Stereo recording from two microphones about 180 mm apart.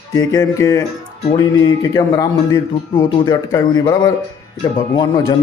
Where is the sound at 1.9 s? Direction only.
20° left (ahead or behind).